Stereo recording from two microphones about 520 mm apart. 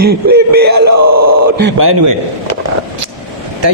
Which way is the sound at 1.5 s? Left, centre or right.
Right.